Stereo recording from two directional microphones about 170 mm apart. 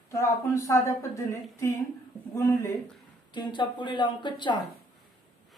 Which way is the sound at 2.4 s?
15° left (ahead or behind).